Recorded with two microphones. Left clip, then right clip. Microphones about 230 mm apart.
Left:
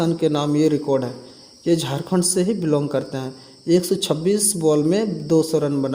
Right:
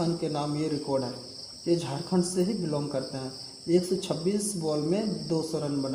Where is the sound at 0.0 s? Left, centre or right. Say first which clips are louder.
Left 10 dB; left.